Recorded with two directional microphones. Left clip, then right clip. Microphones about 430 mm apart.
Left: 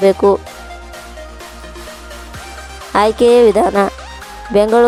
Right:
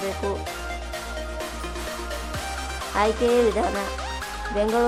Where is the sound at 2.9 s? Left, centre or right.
Centre.